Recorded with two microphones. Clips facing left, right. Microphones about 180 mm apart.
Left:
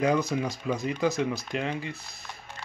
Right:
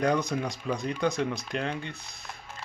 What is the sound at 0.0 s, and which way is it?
Speech, 5° left (ahead or behind).